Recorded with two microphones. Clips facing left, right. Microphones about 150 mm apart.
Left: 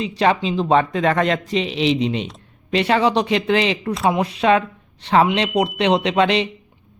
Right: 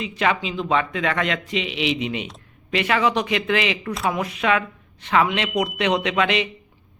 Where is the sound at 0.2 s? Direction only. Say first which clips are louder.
Left 5 dB; 35° left (ahead or behind).